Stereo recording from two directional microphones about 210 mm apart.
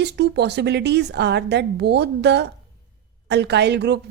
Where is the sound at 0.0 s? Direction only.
55° right (ahead or behind).